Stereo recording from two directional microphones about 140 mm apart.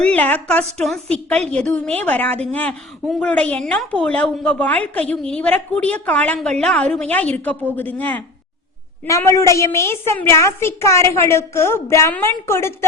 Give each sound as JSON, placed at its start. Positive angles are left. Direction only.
{"t": 0.0, "sound": "a woman's voice", "side_deg": 10}
{"t": 9.0, "sound": "a woman's voice", "side_deg": 20}